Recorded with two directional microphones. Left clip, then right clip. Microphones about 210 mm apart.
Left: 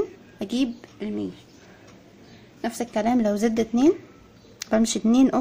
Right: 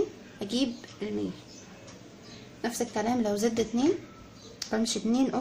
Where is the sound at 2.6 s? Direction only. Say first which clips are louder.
Left 5 dB; 35° left (ahead or behind).